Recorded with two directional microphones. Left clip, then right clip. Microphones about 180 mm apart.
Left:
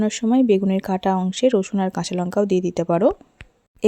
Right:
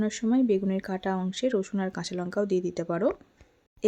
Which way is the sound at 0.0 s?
40° left (ahead or behind).